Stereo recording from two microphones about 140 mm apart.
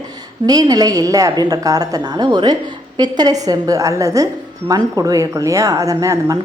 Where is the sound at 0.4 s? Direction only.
25° right (ahead or behind).